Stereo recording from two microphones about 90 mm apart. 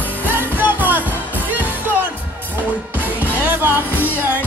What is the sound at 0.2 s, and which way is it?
Music, 20° right (ahead or behind).